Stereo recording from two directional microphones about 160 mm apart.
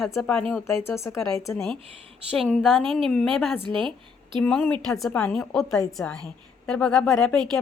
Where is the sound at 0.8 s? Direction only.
15° left (ahead or behind).